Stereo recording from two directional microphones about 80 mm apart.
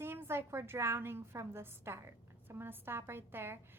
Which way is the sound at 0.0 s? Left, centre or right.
Right.